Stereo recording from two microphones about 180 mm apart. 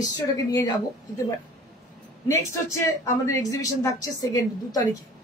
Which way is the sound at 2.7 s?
15° left (ahead or behind).